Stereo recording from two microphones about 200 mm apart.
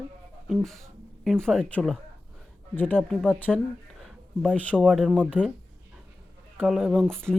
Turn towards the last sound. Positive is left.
turn(degrees=-10)  # may be behind; listen again after turning